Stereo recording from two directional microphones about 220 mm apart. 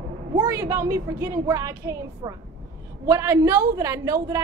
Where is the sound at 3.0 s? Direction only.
15° right (ahead or behind).